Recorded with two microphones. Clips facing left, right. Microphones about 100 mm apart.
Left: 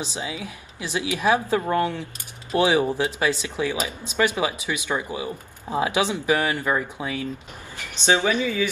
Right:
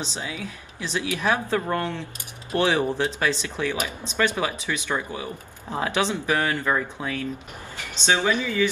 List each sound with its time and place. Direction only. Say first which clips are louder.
0.1 s speech: left 1 dB; 15° left (ahead or behind)